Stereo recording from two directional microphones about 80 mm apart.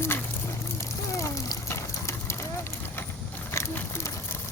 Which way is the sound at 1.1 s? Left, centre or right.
Left.